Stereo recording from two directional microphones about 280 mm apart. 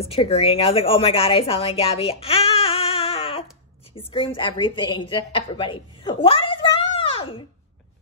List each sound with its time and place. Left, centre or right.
0.1 s a woman's voice: left